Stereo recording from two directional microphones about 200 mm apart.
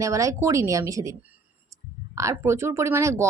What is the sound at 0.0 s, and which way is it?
Speech, 15° right (ahead or behind).